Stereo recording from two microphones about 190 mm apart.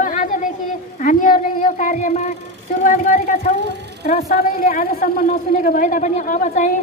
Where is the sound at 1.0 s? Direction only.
45° left (ahead or behind).